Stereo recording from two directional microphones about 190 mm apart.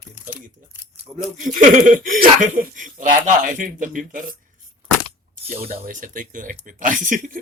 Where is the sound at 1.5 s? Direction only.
45° right (ahead or behind).